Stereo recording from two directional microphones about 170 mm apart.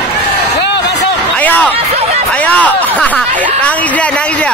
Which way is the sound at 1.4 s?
10° left (ahead or behind).